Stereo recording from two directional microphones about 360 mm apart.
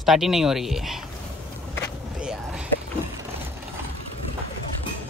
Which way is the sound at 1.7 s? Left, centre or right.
Centre.